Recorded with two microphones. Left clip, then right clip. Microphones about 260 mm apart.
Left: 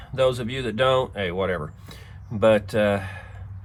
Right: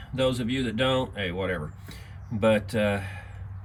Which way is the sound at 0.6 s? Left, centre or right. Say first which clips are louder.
Left 6 dB; centre.